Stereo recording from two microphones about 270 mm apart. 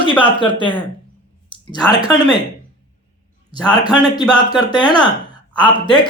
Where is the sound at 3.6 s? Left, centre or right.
Centre.